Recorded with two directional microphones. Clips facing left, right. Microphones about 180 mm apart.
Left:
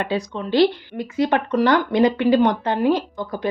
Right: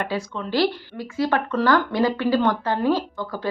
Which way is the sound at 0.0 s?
20° left (ahead or behind).